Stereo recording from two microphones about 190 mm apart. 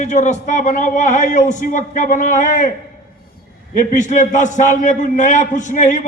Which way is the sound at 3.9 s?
40° left (ahead or behind).